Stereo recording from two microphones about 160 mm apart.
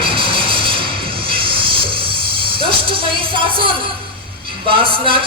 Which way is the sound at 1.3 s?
35° right (ahead or behind).